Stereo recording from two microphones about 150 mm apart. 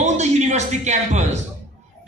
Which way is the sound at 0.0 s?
50° right (ahead or behind).